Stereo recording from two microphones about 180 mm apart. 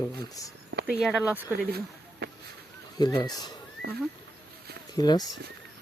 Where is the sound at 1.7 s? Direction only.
60° right (ahead or behind).